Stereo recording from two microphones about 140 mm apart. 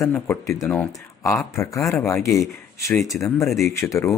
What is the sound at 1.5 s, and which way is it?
Speech, 20° left (ahead or behind).